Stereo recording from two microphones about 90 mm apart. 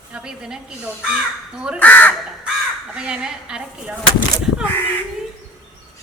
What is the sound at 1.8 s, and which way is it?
Speech, 20° left (ahead or behind).